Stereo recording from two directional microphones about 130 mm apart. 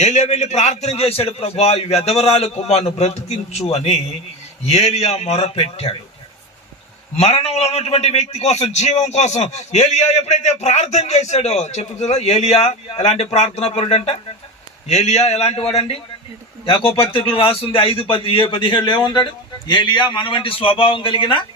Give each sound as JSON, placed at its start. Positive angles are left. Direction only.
{"t": 0.0, "sound": "a man's voice", "side_deg": 65}
{"t": 7.2, "sound": "a man's voice", "side_deg": 55}